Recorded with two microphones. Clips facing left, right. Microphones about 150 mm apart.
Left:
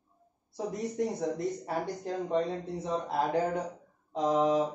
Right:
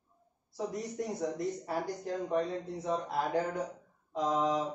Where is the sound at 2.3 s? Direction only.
25° left (ahead or behind).